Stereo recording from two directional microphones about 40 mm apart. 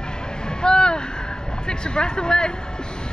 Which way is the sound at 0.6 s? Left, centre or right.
Left.